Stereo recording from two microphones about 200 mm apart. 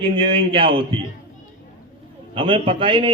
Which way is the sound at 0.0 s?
25° right (ahead or behind).